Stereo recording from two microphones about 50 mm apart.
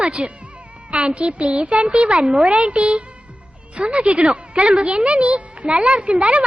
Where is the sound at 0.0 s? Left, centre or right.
Right.